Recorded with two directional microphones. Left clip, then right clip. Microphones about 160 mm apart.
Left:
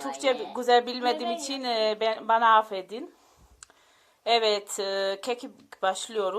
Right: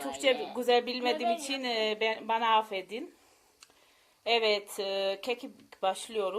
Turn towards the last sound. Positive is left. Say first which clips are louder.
# left 4 dB
turn(degrees=5)  # may be behind; listen again after turning